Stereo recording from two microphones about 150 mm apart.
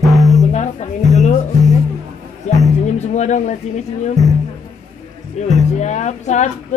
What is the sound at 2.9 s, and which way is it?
Music, 50° left (ahead or behind).